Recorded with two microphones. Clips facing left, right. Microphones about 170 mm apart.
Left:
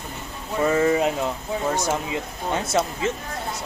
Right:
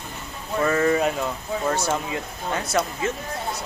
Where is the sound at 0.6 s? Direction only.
15° left (ahead or behind).